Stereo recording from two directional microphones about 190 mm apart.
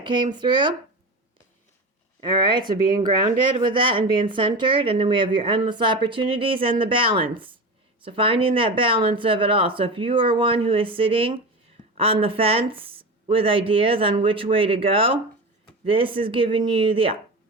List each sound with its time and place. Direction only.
0.0 s speech: 25° right (ahead or behind)
2.2 s speech: 25° right (ahead or behind)